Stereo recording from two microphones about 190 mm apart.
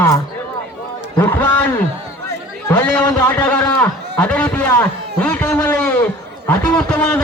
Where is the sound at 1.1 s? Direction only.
10° left (ahead or behind).